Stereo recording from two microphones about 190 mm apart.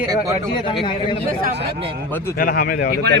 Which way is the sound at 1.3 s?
50° right (ahead or behind).